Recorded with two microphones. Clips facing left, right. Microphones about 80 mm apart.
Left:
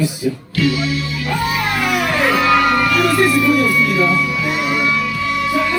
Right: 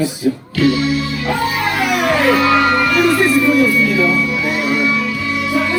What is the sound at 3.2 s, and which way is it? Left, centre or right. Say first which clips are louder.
Speech: right 2 dB; centre.